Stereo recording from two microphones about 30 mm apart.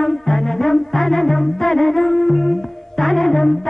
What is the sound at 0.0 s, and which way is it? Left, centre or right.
Music, centre.